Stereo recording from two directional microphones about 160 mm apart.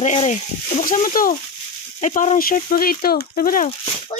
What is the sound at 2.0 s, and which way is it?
Speech, 50° left (ahead or behind).